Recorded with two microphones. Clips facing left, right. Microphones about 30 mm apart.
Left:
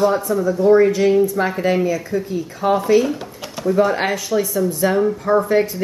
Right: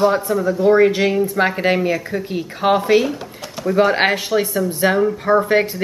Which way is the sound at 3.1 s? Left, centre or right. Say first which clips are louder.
Left 1 dB; centre.